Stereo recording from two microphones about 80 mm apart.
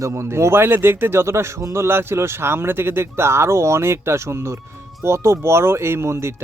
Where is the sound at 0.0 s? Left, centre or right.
Right.